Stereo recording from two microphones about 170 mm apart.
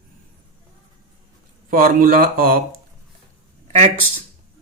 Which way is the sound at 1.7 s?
55° right (ahead or behind).